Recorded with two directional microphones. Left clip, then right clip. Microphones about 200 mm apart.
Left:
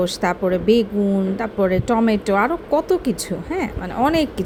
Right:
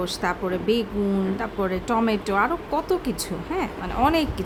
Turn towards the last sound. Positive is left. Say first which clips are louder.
# left 3 dB
turn(degrees=20)  # may be behind; listen again after turning